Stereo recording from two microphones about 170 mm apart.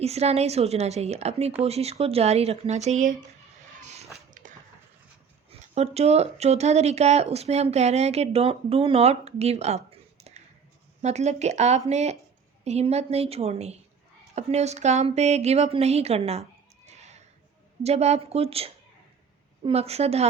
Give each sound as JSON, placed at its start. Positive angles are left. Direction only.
{"t": 0.0, "sound": "speech", "side_deg": -40}
{"t": 3.8, "sound": "a sound", "side_deg": -45}
{"t": 5.5, "sound": "a woman's voice", "side_deg": -40}